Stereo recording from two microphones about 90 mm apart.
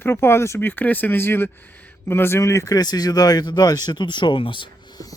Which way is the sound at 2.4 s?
35° left (ahead or behind).